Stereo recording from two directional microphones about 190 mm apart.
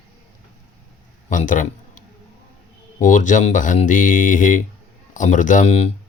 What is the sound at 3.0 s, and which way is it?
Speech, 40° left (ahead or behind).